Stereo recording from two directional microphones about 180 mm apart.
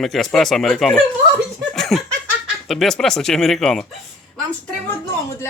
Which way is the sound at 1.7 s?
Centre (ahead or behind).